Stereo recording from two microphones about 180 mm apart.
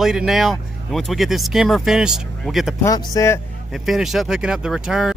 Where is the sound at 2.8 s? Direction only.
20° left (ahead or behind).